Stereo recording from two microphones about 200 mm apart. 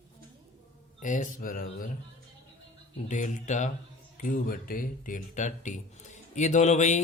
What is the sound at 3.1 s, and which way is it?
Speech, 40° left (ahead or behind).